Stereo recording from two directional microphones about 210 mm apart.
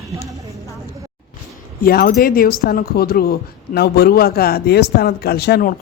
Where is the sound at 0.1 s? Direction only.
15° right (ahead or behind).